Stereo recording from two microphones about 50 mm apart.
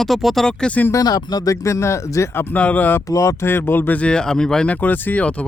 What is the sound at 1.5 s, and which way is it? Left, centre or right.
Speech, left.